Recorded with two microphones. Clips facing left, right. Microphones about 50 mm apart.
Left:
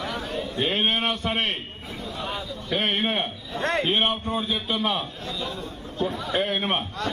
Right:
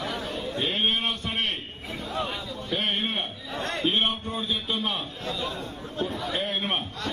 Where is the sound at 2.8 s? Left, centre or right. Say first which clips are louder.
Left 4 dB; left.